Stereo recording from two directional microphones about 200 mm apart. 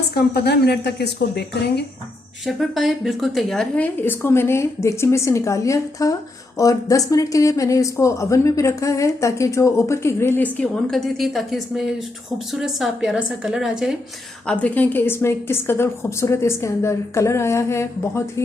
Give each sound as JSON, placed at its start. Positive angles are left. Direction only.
{"t": 0.1, "sound": "a woman's voice", "side_deg": 55}
{"t": 2.4, "sound": "a woman's voice", "side_deg": 0}